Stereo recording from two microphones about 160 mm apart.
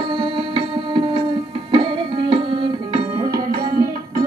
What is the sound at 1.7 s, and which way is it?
Music, 30° right (ahead or behind).